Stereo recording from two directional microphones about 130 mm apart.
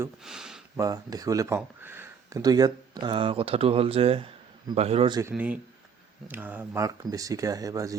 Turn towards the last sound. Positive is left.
turn(degrees=-25)  # may be behind; listen again after turning